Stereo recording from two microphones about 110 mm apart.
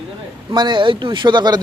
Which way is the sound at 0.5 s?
45° right (ahead or behind).